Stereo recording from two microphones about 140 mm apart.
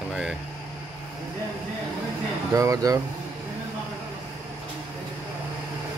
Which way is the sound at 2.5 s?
25° right (ahead or behind).